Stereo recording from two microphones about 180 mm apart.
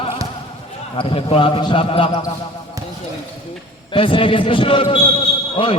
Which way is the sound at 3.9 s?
30° left (ahead or behind).